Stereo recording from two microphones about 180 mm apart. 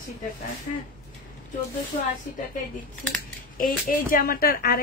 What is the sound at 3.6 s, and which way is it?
Speech, 50° left (ahead or behind).